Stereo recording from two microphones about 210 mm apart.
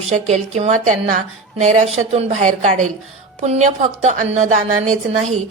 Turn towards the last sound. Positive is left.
turn(degrees=-35)  # may be behind; listen again after turning